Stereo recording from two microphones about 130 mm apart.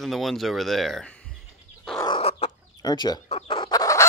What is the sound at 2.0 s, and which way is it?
Chicken, 45° left (ahead or behind).